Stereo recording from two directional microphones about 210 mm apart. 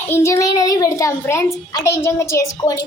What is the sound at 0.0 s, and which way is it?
A child's voice, 10° left (ahead or behind).